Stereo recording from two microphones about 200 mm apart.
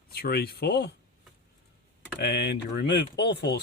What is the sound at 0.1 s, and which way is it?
Speech, 50° left (ahead or behind).